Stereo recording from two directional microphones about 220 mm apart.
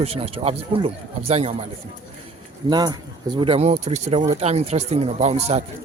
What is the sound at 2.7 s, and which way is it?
Speech, 20° right (ahead or behind).